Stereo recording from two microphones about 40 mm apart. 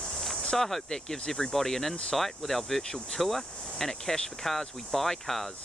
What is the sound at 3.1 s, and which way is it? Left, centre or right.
Speech, centre.